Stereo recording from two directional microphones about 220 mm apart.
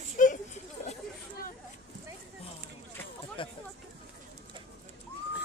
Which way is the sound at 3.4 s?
25° left (ahead or behind).